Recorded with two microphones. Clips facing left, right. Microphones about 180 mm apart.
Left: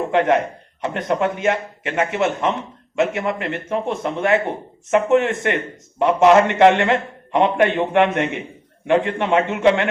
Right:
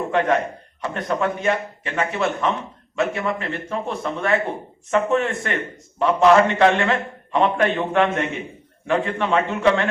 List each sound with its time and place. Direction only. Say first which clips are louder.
0.1 s a man's voice: left 3 dB; 20° left (ahead or behind)